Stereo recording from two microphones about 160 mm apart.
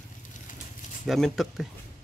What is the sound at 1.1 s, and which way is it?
Speech, centre (ahead or behind).